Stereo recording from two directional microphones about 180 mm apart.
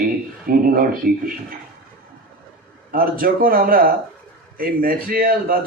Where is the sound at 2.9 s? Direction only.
50° right (ahead or behind).